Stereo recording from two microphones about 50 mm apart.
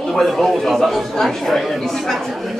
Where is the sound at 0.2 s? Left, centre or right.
Centre.